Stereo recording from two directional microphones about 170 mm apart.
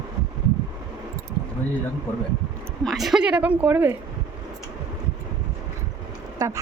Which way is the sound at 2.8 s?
Centre (ahead or behind).